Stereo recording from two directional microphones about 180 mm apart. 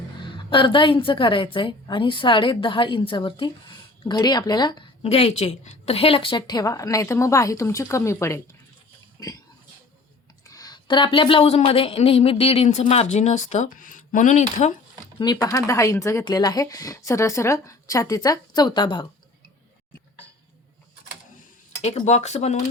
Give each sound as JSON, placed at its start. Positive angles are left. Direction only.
{"t": 0.3, "sound": "a woman's voice", "side_deg": 25}
{"t": 5.0, "sound": "a woman's voice", "side_deg": 35}
{"t": 10.4, "sound": "speech", "side_deg": 20}
{"t": 15.2, "sound": "a woman's voice", "side_deg": 20}
{"t": 21.8, "sound": "speech", "side_deg": 40}